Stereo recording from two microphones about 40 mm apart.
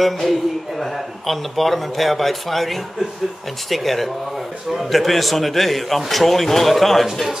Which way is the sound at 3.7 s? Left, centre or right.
Centre.